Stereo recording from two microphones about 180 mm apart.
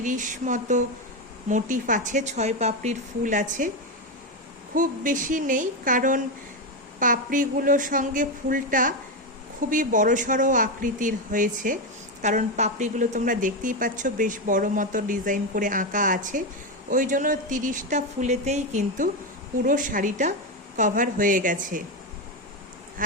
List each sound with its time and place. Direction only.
0.0 s a woman's voice: 45° right (ahead or behind)
4.7 s a woman's voice: 45° right (ahead or behind)
23.0 s a woman's voice: 50° right (ahead or behind)